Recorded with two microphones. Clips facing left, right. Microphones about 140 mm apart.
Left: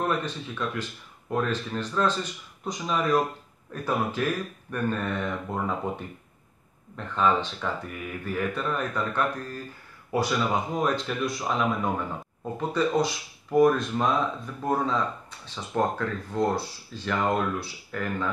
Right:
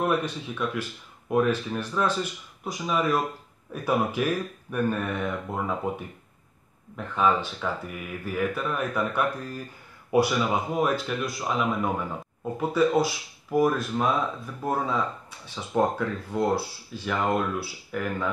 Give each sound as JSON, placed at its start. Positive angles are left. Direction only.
{"t": 0.0, "sound": "speech", "side_deg": -10}